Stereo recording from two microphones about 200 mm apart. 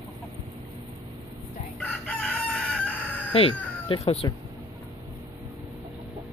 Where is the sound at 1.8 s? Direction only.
5° left (ahead or behind).